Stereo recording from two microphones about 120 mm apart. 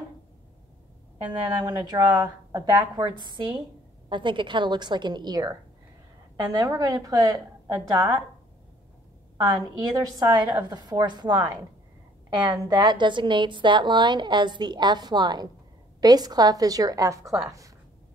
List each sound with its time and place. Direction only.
1.1 s a woman's voice: 35° right (ahead or behind)
9.5 s a woman's voice: 30° right (ahead or behind)
12.4 s a woman's voice: 35° right (ahead or behind)